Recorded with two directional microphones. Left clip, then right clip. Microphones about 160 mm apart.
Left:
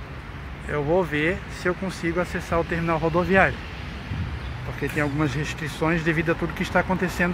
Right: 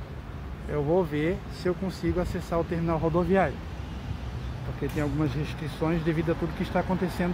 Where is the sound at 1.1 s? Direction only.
15° right (ahead or behind).